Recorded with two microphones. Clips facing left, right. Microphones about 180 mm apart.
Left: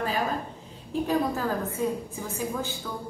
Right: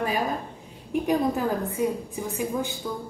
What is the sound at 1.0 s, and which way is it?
A woman's voice, 15° right (ahead or behind).